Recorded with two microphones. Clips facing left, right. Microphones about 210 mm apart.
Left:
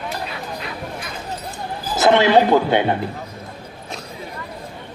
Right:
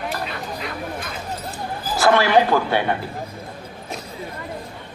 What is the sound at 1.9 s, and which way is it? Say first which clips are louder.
A man's voice: left 2 dB; 20° left (ahead or behind).